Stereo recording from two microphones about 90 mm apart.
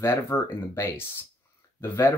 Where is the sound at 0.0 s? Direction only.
30° left (ahead or behind).